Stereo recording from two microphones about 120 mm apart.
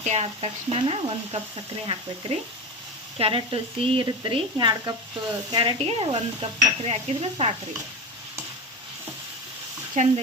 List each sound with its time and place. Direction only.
0.0 s speech: 65° right (ahead or behind)
0.8 s dishes: 50° right (ahead or behind)
3.2 s dishes: 50° right (ahead or behind)
4.0 s speech: 40° right (ahead or behind)
5.5 s dishes: 40° right (ahead or behind); by 7.5 s 55° right (ahead or behind)
10.0 s speech: 90° right